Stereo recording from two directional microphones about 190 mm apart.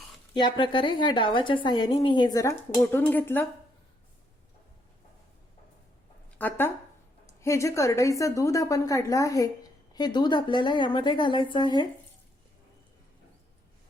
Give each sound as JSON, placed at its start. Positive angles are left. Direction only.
{"t": 0.3, "sound": "a woman's voice", "side_deg": 25}
{"t": 2.7, "sound": "a woman's voice", "side_deg": 10}
{"t": 6.4, "sound": "a woman's voice", "side_deg": 10}